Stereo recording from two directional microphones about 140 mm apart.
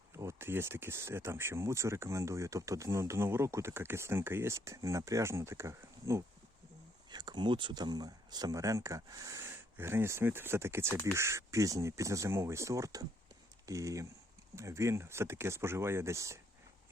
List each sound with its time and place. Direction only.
0.1 s speech: 20° right (ahead or behind)